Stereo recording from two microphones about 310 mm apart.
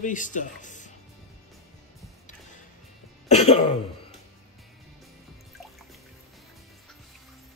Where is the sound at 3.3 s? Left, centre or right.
Centre.